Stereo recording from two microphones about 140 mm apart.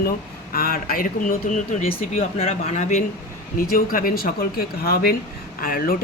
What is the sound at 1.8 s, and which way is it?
Speech, 45° left (ahead or behind).